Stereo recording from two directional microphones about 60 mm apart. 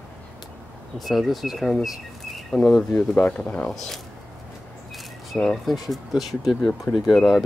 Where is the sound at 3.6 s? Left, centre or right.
Centre.